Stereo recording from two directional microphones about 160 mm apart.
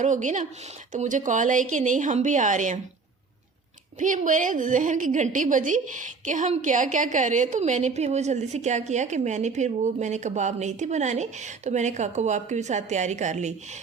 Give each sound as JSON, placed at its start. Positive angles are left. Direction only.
{"t": 0.0, "sound": "a woman's voice", "side_deg": -50}
{"t": 4.0, "sound": "a woman's voice", "side_deg": -55}